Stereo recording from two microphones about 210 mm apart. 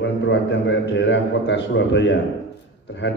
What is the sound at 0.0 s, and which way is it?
A man's voice, 60° left (ahead or behind).